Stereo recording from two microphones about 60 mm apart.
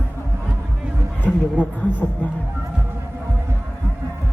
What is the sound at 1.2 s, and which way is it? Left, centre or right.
A woman's voice, left.